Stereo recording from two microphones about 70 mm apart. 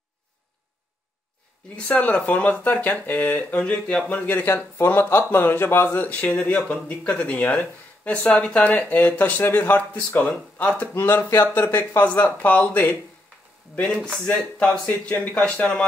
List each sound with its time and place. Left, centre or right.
1.9 s speech: centre
4.5 s speech: left
11.0 s speech: left
14.2 s speech: centre